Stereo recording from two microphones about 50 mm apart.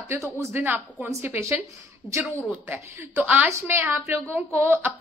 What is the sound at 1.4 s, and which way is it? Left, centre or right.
Speech, right.